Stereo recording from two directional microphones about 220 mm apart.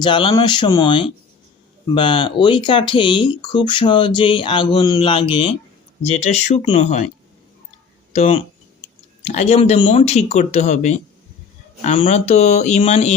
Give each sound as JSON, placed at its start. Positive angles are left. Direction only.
{"t": 0.0, "sound": "speech", "side_deg": 20}
{"t": 8.1, "sound": "speech", "side_deg": 25}